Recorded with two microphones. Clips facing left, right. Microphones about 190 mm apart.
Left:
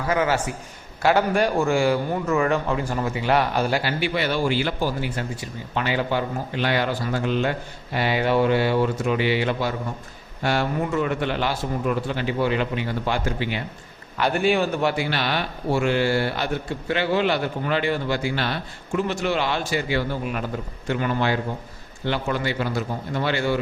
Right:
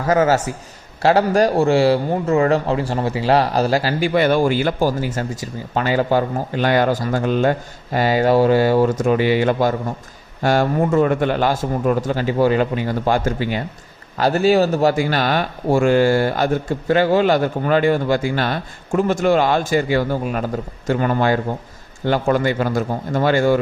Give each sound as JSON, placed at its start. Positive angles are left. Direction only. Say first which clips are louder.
{"t": 0.0, "sound": "a man's voice", "louder": "right 6 dB", "side_deg": -40}